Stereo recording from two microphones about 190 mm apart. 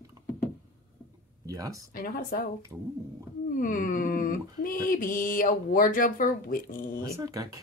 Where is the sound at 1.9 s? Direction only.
50° left (ahead or behind).